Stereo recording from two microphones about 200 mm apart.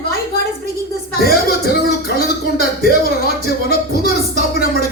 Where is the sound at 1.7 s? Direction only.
50° left (ahead or behind).